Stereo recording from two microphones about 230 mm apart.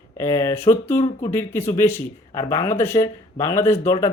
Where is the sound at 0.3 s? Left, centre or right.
Left.